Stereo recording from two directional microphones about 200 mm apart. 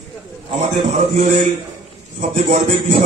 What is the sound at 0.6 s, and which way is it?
A man's voice, 35° right (ahead or behind).